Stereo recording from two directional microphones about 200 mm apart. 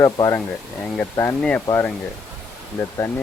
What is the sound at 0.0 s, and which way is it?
Speech, 15° left (ahead or behind).